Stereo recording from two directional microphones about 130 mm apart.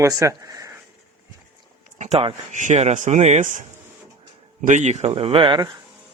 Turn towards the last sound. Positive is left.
turn(degrees=-35)  # may be behind; listen again after turning